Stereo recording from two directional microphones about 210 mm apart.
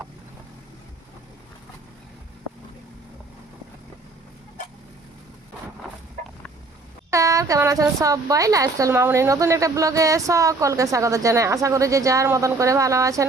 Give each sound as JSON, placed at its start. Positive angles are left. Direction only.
{"t": 7.1, "sound": "a woman's voice", "side_deg": -15}